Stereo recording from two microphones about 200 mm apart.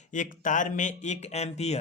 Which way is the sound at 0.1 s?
40° left (ahead or behind).